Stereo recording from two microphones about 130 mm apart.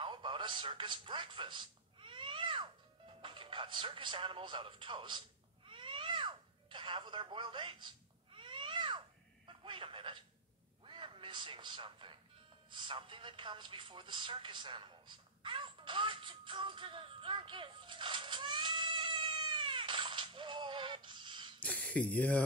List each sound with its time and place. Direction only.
0.0 s a sound: 40° right (ahead or behind)
9.5 s telephone: 40° right (ahead or behind)
10.8 s meow: 40° right (ahead or behind)
12.6 s speech: 40° right (ahead or behind)
21.5 s speech: 10° left (ahead or behind)